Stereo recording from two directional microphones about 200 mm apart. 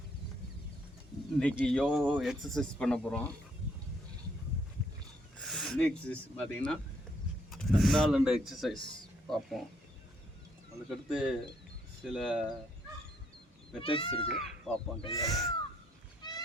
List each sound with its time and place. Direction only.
1.3 s speech: 5° left (ahead or behind)
5.4 s speech: centre (ahead or behind)
7.5 s speech: centre (ahead or behind)
10.8 s speech: 5° right (ahead or behind)
13.8 s speech: 25° left (ahead or behind)
14.3 s speech: centre (ahead or behind)
16.2 s goose: 20° left (ahead or behind)